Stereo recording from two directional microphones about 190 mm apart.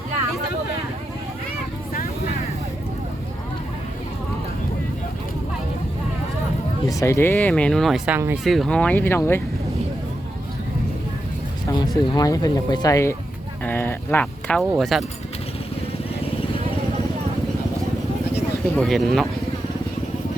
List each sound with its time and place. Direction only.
6.8 s speech: 15° left (ahead or behind)
11.7 s speech: 20° left (ahead or behind); by 15.0 s centre (ahead or behind)
18.8 s speech: centre (ahead or behind)